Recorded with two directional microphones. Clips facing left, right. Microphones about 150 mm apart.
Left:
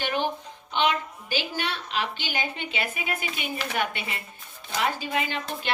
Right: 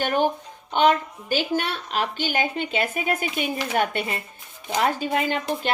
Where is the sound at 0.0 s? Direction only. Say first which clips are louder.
Right 5 dB; 45° right (ahead or behind).